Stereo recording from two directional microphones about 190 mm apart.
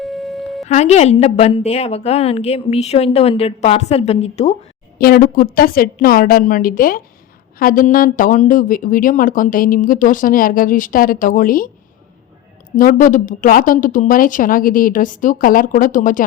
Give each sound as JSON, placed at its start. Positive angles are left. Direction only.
{"t": 0.0, "sound": "music", "side_deg": 0}
{"t": 0.7, "sound": "a woman's voice", "side_deg": 35}
{"t": 4.9, "sound": "speech", "side_deg": 50}
{"t": 12.7, "sound": "speech", "side_deg": 45}